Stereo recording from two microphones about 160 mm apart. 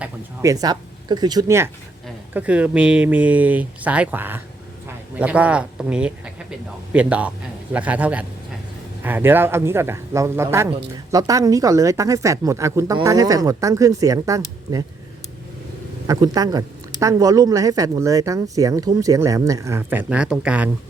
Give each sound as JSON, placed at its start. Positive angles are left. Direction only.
{"t": 0.4, "sound": "speech", "side_deg": -25}
{"t": 16.0, "sound": "speech", "side_deg": -25}